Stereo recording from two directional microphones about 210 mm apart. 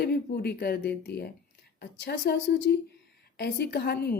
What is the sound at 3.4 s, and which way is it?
Speech, 50° left (ahead or behind).